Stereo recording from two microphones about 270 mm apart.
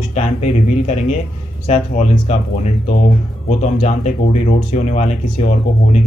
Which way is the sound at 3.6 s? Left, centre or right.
Left.